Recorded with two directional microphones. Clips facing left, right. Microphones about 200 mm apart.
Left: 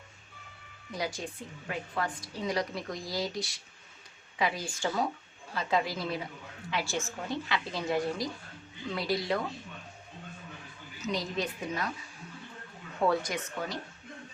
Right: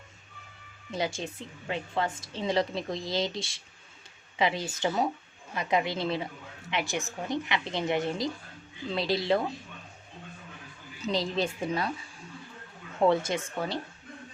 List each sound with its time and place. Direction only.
0.9 s a woman's voice: 25° right (ahead or behind)
11.0 s a woman's voice: 30° right (ahead or behind)
13.0 s a woman's voice: 25° right (ahead or behind)